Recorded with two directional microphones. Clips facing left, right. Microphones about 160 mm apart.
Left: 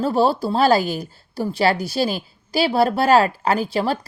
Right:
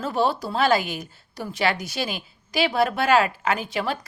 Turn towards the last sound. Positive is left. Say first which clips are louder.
# left 5 dB
turn(degrees=35)  # may be behind; listen again after turning